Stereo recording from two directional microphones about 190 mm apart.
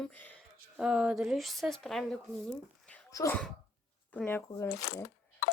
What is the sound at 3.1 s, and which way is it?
Speech, 15° left (ahead or behind).